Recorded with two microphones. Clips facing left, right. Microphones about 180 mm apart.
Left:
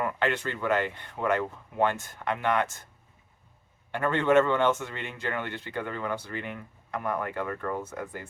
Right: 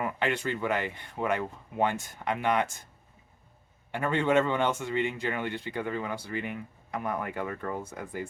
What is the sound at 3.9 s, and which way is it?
Speech, 15° right (ahead or behind).